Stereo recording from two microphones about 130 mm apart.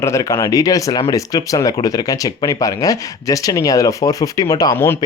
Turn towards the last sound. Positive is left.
turn(degrees=15)  # may be behind; listen again after turning